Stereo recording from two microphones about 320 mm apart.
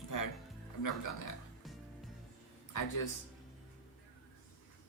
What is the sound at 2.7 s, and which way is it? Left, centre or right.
Speech, left.